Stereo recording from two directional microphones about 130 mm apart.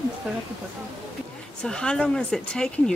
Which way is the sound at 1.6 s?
5° left (ahead or behind).